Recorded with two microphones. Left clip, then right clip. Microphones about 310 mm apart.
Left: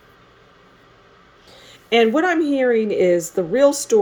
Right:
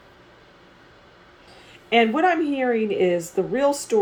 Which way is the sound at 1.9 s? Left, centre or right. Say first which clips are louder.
Left 2 dB; left.